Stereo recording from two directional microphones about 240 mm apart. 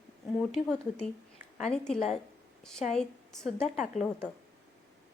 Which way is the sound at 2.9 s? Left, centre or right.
Centre.